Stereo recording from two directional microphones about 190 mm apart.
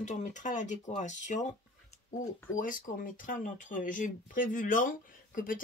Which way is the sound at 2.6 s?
45° left (ahead or behind).